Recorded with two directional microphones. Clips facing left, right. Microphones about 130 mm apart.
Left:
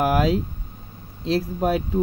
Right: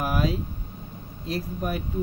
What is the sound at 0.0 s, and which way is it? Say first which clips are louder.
Vehicle: left 6 dB; 90° left.